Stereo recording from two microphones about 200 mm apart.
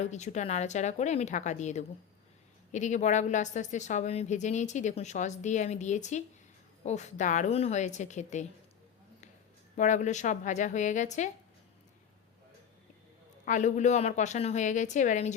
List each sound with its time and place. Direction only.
0.0 s a woman's voice: 35° left (ahead or behind)
9.7 s a woman's voice: 35° left (ahead or behind)
13.4 s a woman's voice: 40° left (ahead or behind)